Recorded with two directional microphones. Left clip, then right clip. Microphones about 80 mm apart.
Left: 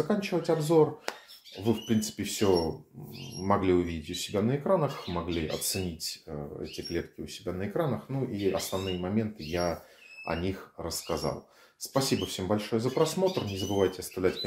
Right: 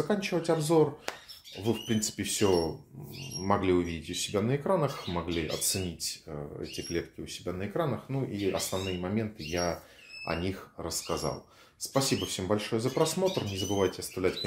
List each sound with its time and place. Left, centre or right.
0.1 s speech: right
3.4 s speech: right
4.3 s speech: right